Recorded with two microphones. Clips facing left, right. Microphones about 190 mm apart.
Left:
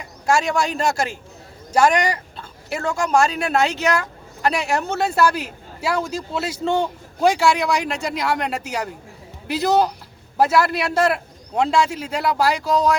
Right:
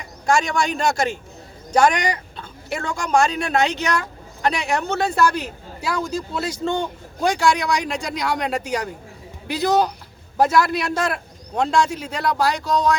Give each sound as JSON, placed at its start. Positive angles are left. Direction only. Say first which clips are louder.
{"t": 0.3, "sound": "speech", "louder": "even", "side_deg": 5}